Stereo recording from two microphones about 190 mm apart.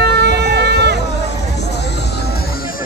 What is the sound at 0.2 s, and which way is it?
Vehicle, 60° right (ahead or behind).